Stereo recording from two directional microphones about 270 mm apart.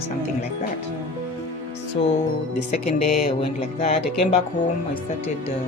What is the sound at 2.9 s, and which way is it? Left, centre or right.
Speech, left.